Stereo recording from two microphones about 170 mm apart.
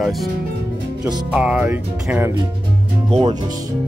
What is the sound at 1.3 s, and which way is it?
Music, 10° right (ahead or behind).